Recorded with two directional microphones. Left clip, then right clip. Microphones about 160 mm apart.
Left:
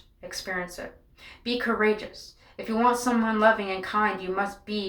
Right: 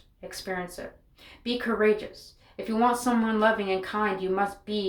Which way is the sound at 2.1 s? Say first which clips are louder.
Left 2 dB; 35° right (ahead or behind).